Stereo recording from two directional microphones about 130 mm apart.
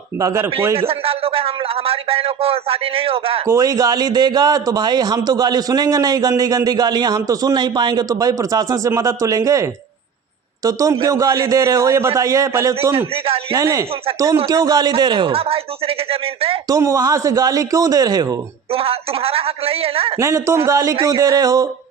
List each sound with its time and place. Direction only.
0.2 s speech: 25° right (ahead or behind)
0.8 s a man's voice: 50° right (ahead or behind)
3.4 s a man's voice: 25° right (ahead or behind); by 16.6 s 50° right (ahead or behind)
16.6 s speech: 25° right (ahead or behind)
18.7 s a man's voice: 45° right (ahead or behind)
20.1 s speech: 25° right (ahead or behind)